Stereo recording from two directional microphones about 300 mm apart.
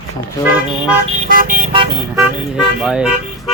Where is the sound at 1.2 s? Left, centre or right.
Right.